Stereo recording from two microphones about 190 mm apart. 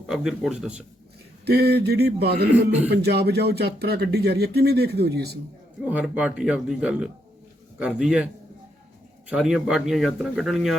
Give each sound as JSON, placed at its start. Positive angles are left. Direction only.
{"t": 0.1, "sound": "speech", "side_deg": -5}
{"t": 1.5, "sound": "speech", "side_deg": -60}
{"t": 5.8, "sound": "speech", "side_deg": -5}
{"t": 9.3, "sound": "speech", "side_deg": 0}